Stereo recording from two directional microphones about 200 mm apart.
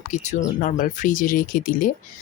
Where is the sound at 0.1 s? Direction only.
40° left (ahead or behind).